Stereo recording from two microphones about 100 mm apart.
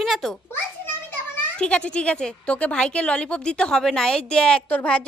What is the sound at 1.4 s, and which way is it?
Speech, 10° left (ahead or behind).